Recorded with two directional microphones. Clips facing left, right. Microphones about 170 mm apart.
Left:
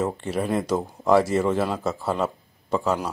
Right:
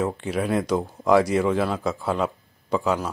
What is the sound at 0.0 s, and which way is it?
Speech, centre (ahead or behind).